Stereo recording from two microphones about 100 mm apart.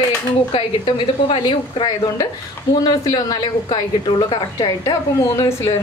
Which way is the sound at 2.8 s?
40° left (ahead or behind).